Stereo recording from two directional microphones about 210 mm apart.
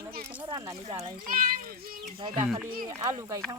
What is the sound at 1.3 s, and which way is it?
Speech, 45° right (ahead or behind).